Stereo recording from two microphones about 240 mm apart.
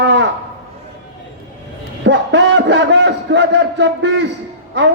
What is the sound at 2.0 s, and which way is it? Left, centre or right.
A man's voice, right.